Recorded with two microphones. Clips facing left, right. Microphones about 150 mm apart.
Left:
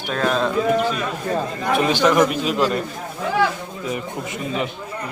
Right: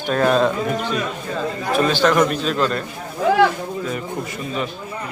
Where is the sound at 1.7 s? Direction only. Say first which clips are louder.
Even; 15° left (ahead or behind).